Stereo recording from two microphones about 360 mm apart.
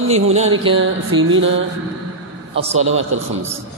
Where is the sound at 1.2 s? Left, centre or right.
Right.